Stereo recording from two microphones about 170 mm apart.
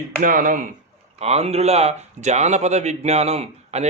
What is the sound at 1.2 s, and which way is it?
A man's voice, 40° right (ahead or behind).